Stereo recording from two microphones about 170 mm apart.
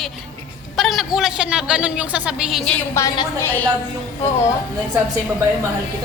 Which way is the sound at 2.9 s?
20° left (ahead or behind).